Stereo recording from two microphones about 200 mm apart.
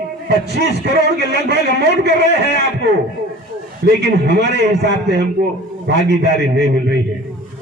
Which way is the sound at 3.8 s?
55° right (ahead or behind).